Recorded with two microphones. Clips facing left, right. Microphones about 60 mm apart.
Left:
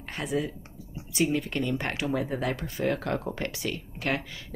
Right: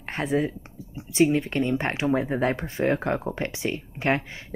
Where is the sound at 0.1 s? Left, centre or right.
Right.